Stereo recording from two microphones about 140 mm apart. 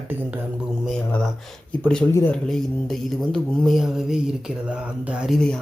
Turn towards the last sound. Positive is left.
turn(degrees=5)  # may be behind; listen again after turning